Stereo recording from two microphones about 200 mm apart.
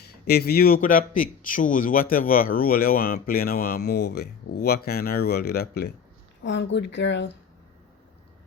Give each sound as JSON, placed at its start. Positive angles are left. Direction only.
{"t": 0.0, "sound": "a man's voice", "side_deg": 55}